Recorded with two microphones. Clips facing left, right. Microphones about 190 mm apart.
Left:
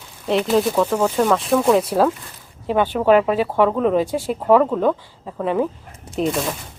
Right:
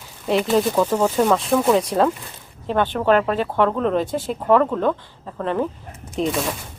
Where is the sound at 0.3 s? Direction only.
Centre (ahead or behind).